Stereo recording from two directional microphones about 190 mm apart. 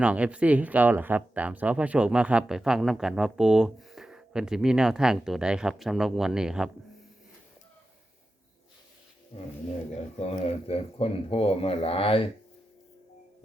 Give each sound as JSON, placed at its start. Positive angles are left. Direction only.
{"t": 0.0, "sound": "speech", "side_deg": -5}
{"t": 10.2, "sound": "speech", "side_deg": 30}